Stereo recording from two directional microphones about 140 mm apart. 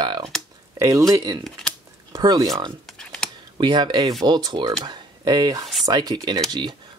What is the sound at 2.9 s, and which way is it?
Computer keyboard, 5° left (ahead or behind).